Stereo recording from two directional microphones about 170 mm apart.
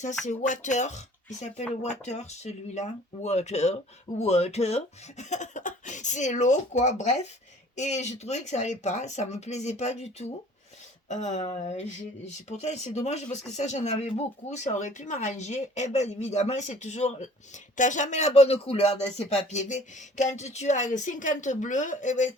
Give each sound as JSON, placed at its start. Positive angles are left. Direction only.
{"t": 0.3, "sound": "speech", "side_deg": 45}